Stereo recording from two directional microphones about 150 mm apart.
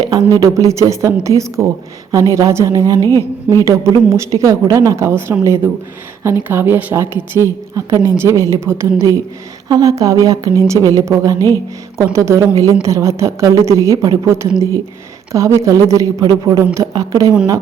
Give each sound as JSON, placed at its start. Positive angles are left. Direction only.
{"t": 0.0, "sound": "a woman's voice", "side_deg": -25}
{"t": 3.0, "sound": "speech", "side_deg": 20}
{"t": 3.5, "sound": "a woman's voice", "side_deg": -20}